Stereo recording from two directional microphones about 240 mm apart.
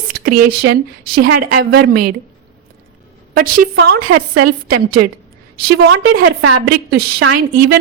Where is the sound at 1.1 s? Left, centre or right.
Right.